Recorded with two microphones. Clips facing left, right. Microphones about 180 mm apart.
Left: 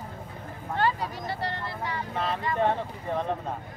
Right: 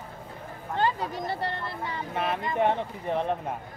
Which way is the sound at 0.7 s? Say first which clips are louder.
Even; 25° right (ahead or behind).